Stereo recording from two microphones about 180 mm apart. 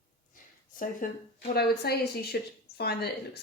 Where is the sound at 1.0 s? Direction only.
45° left (ahead or behind).